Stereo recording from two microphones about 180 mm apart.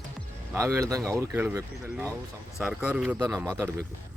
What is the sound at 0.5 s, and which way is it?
Speech, 15° right (ahead or behind).